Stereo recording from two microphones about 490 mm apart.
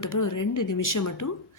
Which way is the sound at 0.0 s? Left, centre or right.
Left.